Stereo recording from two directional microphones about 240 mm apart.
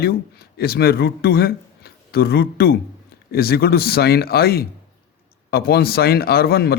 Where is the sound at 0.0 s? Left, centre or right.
Left.